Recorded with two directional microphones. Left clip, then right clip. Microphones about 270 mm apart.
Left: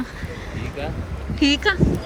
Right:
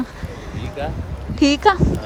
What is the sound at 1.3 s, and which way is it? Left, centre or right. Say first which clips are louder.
Speech: right 2 dB; right.